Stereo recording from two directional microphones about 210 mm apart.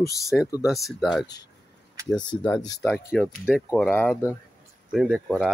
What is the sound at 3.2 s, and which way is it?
Speech, 10° left (ahead or behind).